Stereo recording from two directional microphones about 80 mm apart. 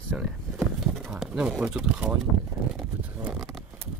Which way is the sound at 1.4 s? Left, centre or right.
Centre.